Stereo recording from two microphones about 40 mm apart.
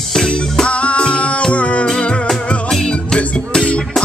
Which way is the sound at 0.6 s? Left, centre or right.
Left.